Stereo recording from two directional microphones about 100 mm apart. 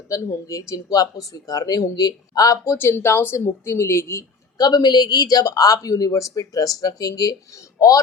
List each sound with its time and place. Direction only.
0.1 s speech: 35° left (ahead or behind)
2.6 s speech: 25° left (ahead or behind)